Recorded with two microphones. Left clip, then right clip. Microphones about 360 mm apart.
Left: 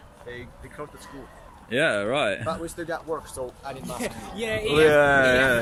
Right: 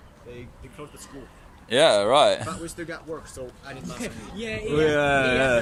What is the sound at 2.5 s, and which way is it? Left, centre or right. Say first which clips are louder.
Speech: left 4 dB; centre.